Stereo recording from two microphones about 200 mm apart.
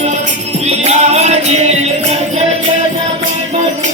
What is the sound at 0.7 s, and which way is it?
Music, 35° right (ahead or behind).